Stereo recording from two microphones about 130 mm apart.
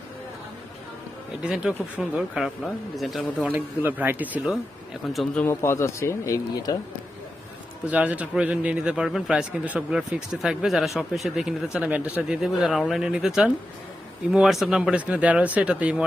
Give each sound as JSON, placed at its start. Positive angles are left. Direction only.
{"t": 1.4, "sound": "a man's voice", "side_deg": -10}
{"t": 3.5, "sound": "speech", "side_deg": -15}
{"t": 5.0, "sound": "a man's voice", "side_deg": 0}
{"t": 5.5, "sound": "speech", "side_deg": 20}
{"t": 7.9, "sound": "a man's voice", "side_deg": -10}